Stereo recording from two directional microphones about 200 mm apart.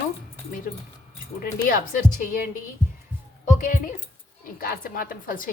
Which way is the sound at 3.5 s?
40° left (ahead or behind).